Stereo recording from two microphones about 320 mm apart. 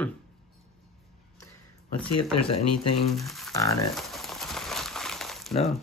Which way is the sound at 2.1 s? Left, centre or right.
Left.